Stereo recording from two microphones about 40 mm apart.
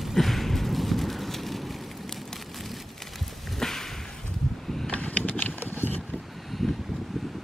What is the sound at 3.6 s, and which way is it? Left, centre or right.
Whip, centre.